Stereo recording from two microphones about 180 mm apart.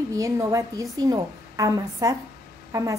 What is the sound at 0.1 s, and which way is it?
A woman's voice, 15° right (ahead or behind).